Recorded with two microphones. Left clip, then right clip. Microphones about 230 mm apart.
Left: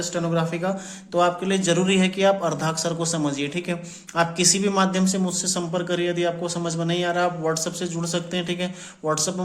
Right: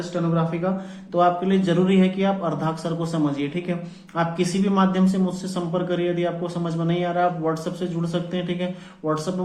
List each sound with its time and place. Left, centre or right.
0.1 s speech: left